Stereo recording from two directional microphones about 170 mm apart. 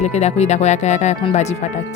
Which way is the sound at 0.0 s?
40° left (ahead or behind).